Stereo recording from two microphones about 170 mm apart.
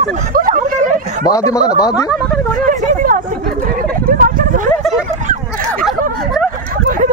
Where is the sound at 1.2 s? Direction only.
20° left (ahead or behind).